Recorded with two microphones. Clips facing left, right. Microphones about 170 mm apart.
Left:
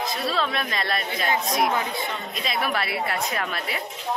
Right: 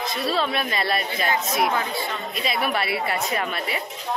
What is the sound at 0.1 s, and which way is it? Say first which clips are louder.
Speech: right 2 dB; centre (ahead or behind).